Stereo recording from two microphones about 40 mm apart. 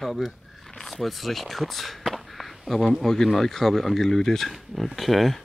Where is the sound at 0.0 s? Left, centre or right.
Centre.